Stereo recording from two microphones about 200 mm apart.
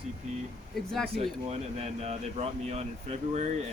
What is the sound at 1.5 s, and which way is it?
Speech, 30° right (ahead or behind).